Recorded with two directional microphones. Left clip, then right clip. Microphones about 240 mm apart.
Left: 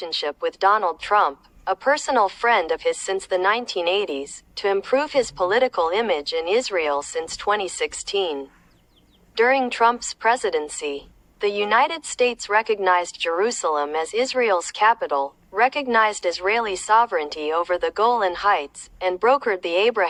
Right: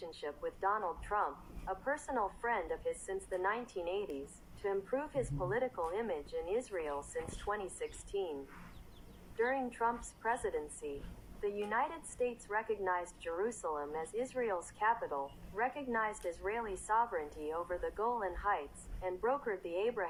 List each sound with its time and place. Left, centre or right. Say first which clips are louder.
0.0 s a woman's voice: left 17 dB; left